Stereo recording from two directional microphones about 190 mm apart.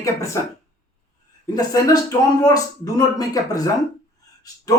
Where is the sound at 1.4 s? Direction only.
20° left (ahead or behind).